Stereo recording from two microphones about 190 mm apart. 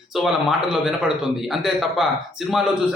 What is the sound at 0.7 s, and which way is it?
A man's voice, 5° right (ahead or behind).